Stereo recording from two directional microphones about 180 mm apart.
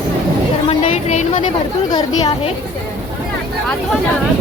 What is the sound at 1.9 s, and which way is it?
Speech, 20° left (ahead or behind).